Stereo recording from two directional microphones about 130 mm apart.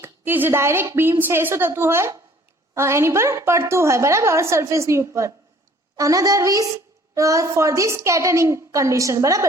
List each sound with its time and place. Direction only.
0.0 s a woman's voice: 15° right (ahead or behind)